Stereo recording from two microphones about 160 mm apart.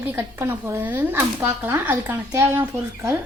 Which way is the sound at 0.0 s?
15° right (ahead or behind).